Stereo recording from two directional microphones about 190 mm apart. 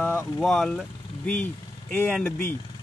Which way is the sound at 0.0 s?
10° left (ahead or behind).